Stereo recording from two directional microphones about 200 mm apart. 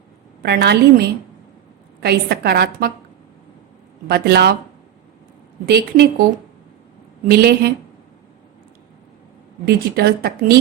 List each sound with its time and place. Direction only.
0.4 s a woman's voice: 50° right (ahead or behind)
4.1 s a woman's voice: 50° right (ahead or behind)
5.6 s a woman's voice: 50° right (ahead or behind)
7.3 s a woman's voice: 50° right (ahead or behind)
9.6 s a woman's voice: 50° right (ahead or behind)